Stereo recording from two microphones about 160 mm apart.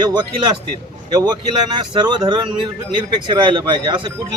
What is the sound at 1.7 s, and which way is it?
Speech, 30° right (ahead or behind).